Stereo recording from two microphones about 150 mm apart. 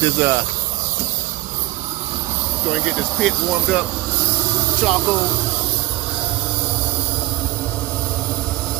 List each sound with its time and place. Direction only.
0.0 s speech: 20° right (ahead or behind)
2.6 s speech: 5° right (ahead or behind)
4.8 s speech: centre (ahead or behind)